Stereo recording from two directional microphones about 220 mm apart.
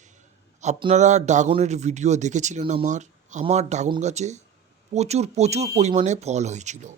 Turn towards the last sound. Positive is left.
turn(degrees=-30)  # may be behind; listen again after turning